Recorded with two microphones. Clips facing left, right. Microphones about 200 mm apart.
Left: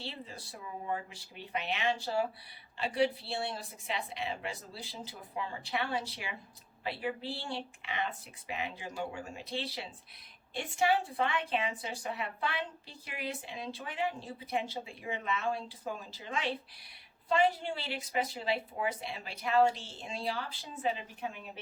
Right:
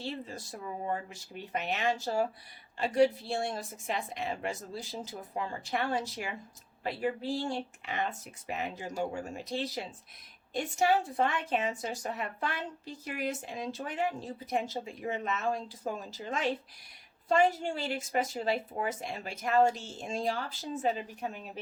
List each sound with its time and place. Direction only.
0.0 s a woman's voice: 45° right (ahead or behind)